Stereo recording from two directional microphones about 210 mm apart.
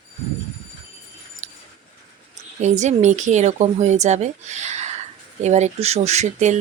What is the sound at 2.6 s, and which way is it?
Speech, 35° right (ahead or behind).